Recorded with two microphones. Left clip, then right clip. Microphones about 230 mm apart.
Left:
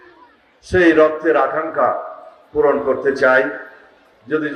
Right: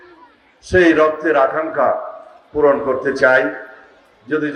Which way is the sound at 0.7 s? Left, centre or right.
Right.